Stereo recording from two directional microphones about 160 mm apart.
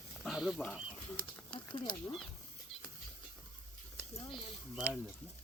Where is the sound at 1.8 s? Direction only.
30° left (ahead or behind).